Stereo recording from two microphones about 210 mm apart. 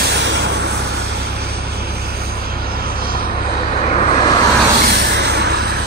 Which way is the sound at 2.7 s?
45° right (ahead or behind).